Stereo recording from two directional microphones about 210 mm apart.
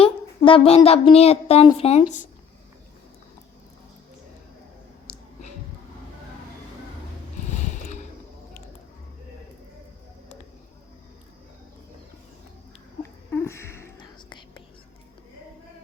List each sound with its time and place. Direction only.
0.0 s speech: 25° left (ahead or behind)
7.4 s a sound: 35° left (ahead or behind)
13.0 s whispering: 15° left (ahead or behind)